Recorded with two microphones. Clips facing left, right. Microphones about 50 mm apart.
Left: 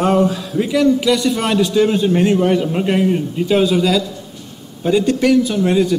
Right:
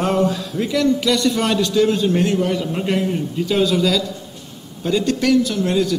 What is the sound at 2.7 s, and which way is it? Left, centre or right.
A man's voice, centre.